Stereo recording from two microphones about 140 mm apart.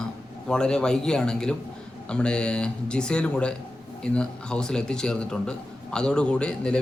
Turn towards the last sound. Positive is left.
turn(degrees=5)  # may be behind; listen again after turning